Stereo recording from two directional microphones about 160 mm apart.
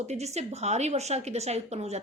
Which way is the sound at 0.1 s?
45° right (ahead or behind).